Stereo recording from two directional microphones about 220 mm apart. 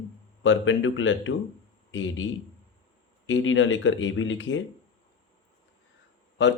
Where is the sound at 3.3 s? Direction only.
60° left (ahead or behind).